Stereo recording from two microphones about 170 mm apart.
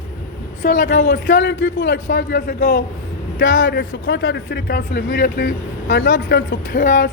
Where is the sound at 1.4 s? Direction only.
75° left (ahead or behind).